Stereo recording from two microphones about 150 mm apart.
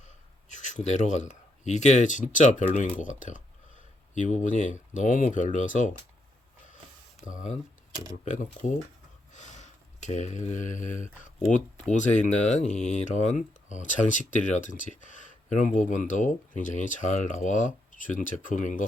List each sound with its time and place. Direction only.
0.0 s speech: 55° left (ahead or behind)
7.3 s speech: 55° left (ahead or behind)